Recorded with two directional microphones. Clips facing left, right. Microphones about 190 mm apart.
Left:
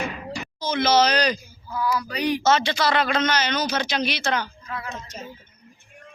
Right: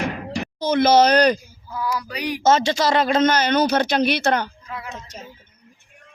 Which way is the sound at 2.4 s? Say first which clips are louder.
Right 6 dB; 45° right (ahead or behind).